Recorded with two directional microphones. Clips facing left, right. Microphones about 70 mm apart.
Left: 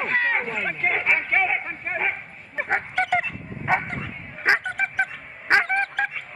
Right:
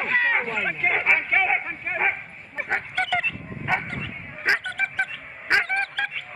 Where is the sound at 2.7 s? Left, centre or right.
Left.